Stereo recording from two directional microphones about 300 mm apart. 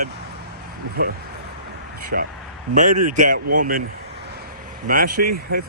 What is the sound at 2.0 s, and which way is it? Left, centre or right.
Speech, right.